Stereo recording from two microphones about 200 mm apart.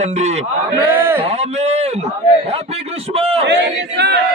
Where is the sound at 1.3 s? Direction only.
30° right (ahead or behind).